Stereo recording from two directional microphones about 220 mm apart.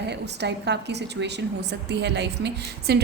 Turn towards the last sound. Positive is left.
turn(degrees=-50)  # may be behind; listen again after turning